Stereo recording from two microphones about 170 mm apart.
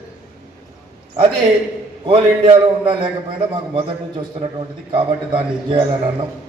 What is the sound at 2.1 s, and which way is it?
A man's voice, 30° right (ahead or behind).